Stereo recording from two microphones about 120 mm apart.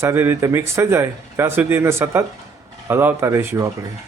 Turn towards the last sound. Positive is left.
turn(degrees=-20)  # may be behind; listen again after turning